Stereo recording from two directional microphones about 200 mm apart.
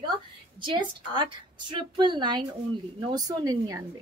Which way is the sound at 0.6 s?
25° right (ahead or behind).